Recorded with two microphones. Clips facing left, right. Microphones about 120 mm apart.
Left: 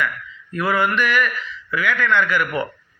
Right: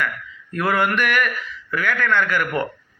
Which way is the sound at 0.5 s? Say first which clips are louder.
Even; 55° right (ahead or behind).